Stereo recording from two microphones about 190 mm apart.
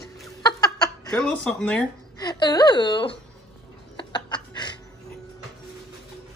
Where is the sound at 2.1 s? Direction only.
20° left (ahead or behind).